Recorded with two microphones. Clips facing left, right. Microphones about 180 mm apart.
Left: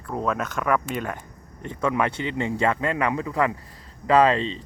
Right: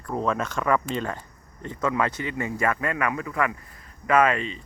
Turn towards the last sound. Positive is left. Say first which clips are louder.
# left 3 dB
turn(degrees=30)  # may be behind; listen again after turning